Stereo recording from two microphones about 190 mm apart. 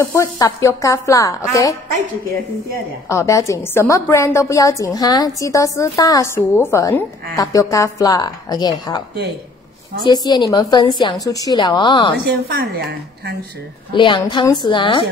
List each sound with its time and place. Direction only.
0.0 s a woman's voice: 15° left (ahead or behind)
3.1 s a woman's voice: 15° left (ahead or behind)
10.0 s a woman's voice: 20° left (ahead or behind)
12.4 s speech: 55° right (ahead or behind)
13.9 s a woman's voice: 25° left (ahead or behind)